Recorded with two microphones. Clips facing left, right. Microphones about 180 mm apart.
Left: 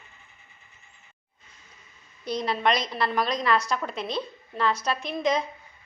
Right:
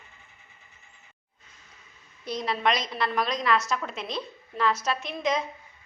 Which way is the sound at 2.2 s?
Centre (ahead or behind).